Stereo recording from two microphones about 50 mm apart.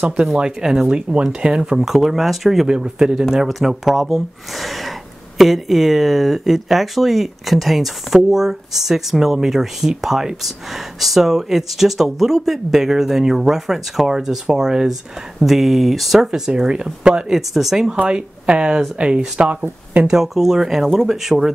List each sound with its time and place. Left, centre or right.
0.0 s speech: centre
1.9 s speech: centre
2.7 s speech: centre
3.4 s speech: centre
18.0 s speech: right